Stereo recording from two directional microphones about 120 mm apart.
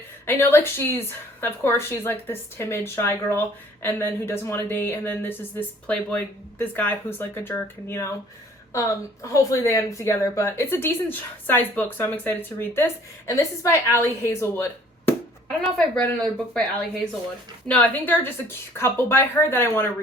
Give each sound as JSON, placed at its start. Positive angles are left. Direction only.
{"t": 0.3, "sound": "a woman's voice", "side_deg": 15}